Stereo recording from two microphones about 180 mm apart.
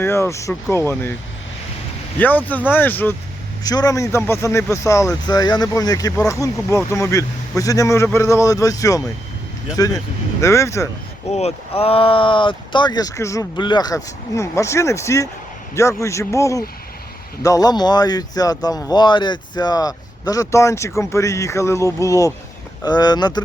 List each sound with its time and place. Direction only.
0.0 s speech: 15° left (ahead or behind)
2.1 s speech: 10° left (ahead or behind)
11.3 s speech: 35° left (ahead or behind)